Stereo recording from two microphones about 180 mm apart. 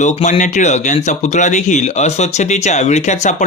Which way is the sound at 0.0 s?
40° left (ahead or behind).